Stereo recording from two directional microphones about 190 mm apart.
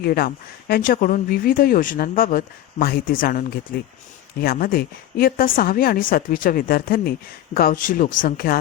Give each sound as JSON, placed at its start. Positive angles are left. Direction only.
{"t": 0.0, "sound": "speech", "side_deg": 55}